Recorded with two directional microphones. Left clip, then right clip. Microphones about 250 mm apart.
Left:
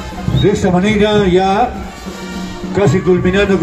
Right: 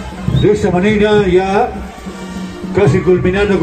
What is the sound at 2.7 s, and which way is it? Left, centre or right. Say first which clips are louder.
Speech: right 1 dB; left.